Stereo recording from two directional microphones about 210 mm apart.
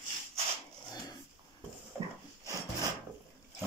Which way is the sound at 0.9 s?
20° left (ahead or behind).